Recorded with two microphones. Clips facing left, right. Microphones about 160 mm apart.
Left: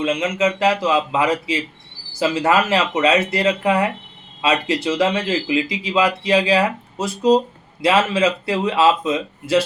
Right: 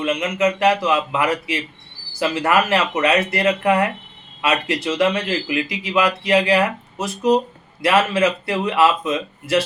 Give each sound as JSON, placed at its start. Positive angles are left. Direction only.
{"t": 0.0, "sound": "speech", "side_deg": 25}